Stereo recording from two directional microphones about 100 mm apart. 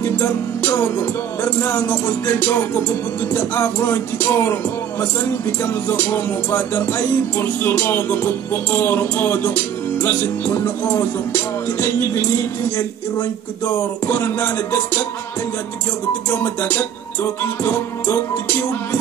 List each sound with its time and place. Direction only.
0.0 s music: 15° left (ahead or behind)
5.6 s music: 20° left (ahead or behind)
13.7 s music: 20° left (ahead or behind)
16.3 s music: 15° left (ahead or behind)